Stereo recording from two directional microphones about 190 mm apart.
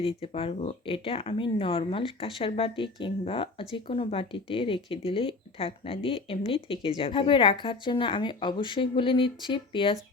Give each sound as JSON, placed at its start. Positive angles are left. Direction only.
{"t": 0.0, "sound": "speech", "side_deg": 30}